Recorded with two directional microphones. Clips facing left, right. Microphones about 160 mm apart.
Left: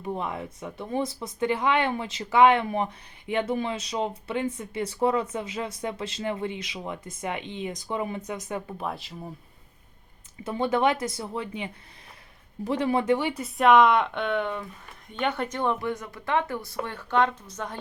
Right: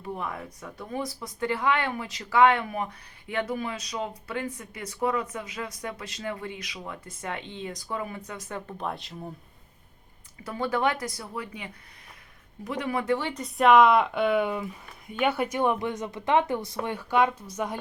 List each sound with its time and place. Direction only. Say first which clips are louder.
0.0 s speech: left 3 dB; 20° left (ahead or behind); by 9.3 s centre (ahead or behind)
10.4 s speech: left 3 dB; 20° left (ahead or behind)
13.1 s speech: left 1 dB; 10° left (ahead or behind); by 17.7 s 10° right (ahead or behind)